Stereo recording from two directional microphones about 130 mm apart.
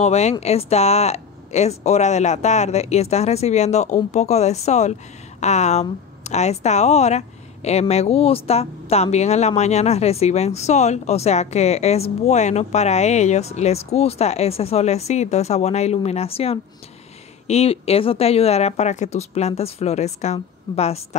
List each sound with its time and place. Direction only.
0.0 s a woman's voice: 60° left (ahead or behind)